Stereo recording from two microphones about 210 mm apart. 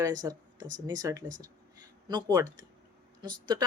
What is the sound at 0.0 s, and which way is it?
Speech, 15° right (ahead or behind).